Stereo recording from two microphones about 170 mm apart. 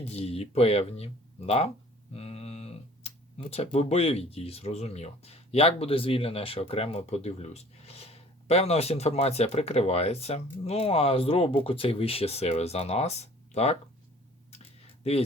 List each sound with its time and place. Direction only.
0.1 s speech: 35° left (ahead or behind)